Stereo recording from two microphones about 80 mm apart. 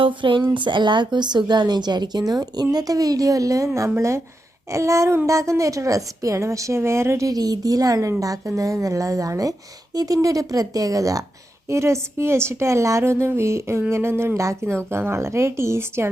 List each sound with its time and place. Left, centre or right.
0.0 s speech: right
3.8 s a woman's voice: right
7.3 s a woman's voice: right